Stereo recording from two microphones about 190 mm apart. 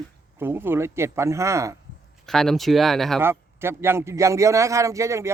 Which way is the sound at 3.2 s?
10° right (ahead or behind).